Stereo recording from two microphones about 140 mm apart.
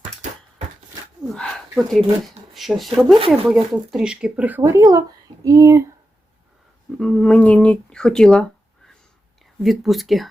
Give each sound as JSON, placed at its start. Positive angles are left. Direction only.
{"t": 1.3, "sound": "speech", "side_deg": 5}
{"t": 7.0, "sound": "speech", "side_deg": 5}
{"t": 9.6, "sound": "speech", "side_deg": 0}